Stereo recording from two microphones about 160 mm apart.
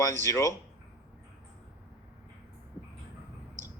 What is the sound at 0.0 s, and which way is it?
Speech, 15° left (ahead or behind).